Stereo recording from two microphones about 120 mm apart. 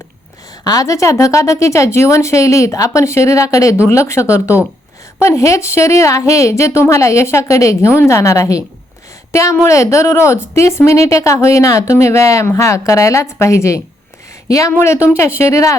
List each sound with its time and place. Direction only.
0.6 s a woman's voice: 30° left (ahead or behind)